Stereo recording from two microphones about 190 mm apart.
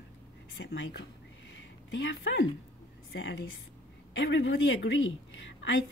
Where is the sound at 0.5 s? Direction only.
85° left.